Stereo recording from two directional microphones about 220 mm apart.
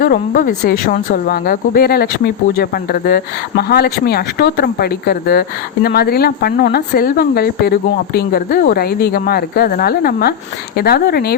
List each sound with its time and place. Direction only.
0.0 s speech: 40° left (ahead or behind)